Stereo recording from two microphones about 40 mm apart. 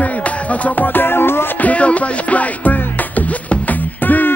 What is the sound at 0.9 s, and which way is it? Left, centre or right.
Music, left.